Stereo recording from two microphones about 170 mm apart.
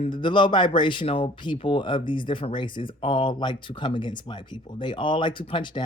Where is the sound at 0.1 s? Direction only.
30° left (ahead or behind).